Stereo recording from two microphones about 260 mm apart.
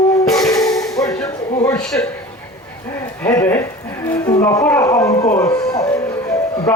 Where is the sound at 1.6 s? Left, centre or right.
Centre.